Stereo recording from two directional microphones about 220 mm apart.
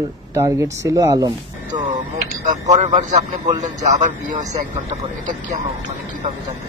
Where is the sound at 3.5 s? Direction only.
35° right (ahead or behind).